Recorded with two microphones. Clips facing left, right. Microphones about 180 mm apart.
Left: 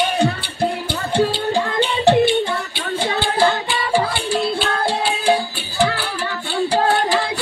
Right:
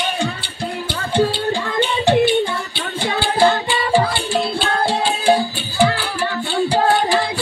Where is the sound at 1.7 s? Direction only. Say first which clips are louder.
Even; 30° left (ahead or behind).